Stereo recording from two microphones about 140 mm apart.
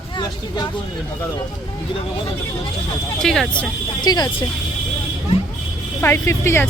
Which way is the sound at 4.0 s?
30° left (ahead or behind).